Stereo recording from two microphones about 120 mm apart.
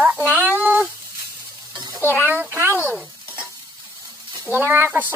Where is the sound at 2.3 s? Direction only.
20° right (ahead or behind).